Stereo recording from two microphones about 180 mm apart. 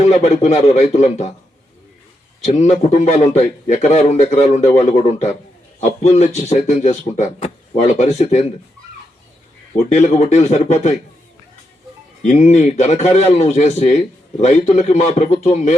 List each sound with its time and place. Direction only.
0.0 s a man's voice: 35° left (ahead or behind)
2.4 s a man's voice: 40° left (ahead or behind)
9.9 s a man's voice: 40° left (ahead or behind)
12.2 s a man's voice: 40° left (ahead or behind)